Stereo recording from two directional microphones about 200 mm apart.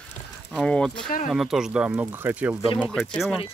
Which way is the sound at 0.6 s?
5° left (ahead or behind).